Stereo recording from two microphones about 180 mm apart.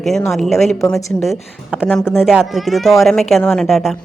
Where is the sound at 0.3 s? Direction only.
Centre (ahead or behind).